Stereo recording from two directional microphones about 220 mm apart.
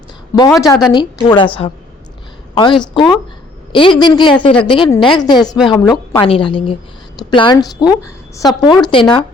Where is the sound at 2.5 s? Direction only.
20° left (ahead or behind).